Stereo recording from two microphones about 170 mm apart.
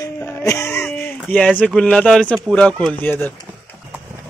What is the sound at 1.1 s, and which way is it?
Speech, 5° left (ahead or behind).